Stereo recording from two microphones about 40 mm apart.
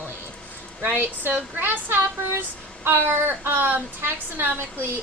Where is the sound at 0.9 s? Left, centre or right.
Right.